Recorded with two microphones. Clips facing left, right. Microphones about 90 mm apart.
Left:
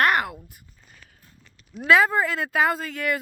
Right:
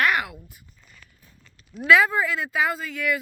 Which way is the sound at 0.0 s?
45° left (ahead or behind).